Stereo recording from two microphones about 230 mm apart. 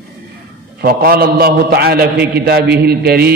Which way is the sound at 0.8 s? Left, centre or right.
Right.